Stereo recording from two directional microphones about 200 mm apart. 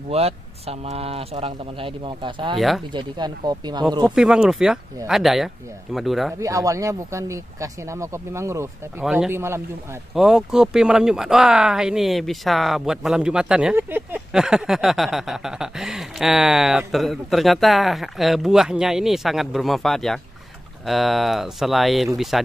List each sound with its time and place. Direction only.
0.1 s speech: 30° right (ahead or behind)
2.5 s speech: centre (ahead or behind)
2.9 s speech: 20° right (ahead or behind)
4.0 s speech: 5° right (ahead or behind)
6.4 s speech: 15° right (ahead or behind); by 22.4 s centre (ahead or behind)